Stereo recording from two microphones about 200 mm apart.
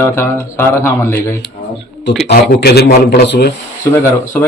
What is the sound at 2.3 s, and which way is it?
A man's voice, 55° left (ahead or behind).